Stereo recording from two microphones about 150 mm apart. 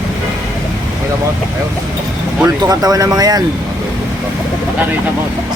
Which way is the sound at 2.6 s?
25° right (ahead or behind).